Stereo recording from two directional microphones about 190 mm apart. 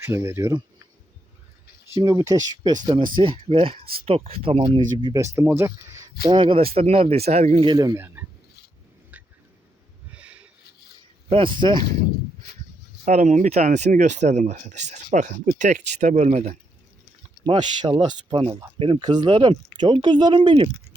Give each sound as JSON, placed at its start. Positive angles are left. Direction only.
{"t": 0.0, "sound": "speech", "side_deg": -15}
{"t": 2.0, "sound": "speech", "side_deg": -15}
{"t": 6.3, "sound": "speech", "side_deg": -25}
{"t": 7.6, "sound": "speech", "side_deg": -20}
{"t": 9.1, "sound": "a sound", "side_deg": -10}
{"t": 11.3, "sound": "speech", "side_deg": -25}
{"t": 13.1, "sound": "speech", "side_deg": -40}